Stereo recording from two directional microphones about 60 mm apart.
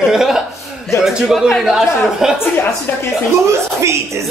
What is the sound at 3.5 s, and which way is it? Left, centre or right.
Speech, right.